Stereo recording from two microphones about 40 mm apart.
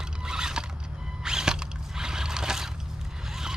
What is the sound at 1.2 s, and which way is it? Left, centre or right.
Mechanisms, centre.